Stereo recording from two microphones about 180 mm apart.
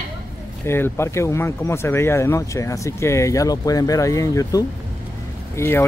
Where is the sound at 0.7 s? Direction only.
15° left (ahead or behind).